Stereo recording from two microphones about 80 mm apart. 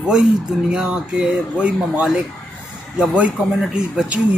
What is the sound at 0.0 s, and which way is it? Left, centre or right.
Speech, centre.